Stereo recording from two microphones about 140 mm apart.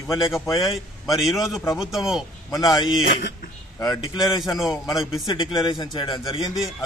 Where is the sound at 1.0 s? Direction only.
Centre (ahead or behind).